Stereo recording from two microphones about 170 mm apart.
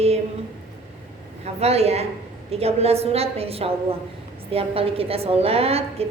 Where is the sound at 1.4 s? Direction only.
35° right (ahead or behind).